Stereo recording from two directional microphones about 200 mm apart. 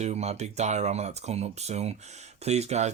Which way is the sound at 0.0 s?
35° right (ahead or behind).